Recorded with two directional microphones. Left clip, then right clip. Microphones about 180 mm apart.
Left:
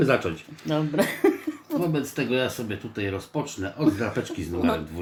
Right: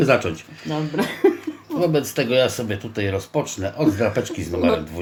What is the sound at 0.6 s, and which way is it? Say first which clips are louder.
Speech: even; 30° left (ahead or behind).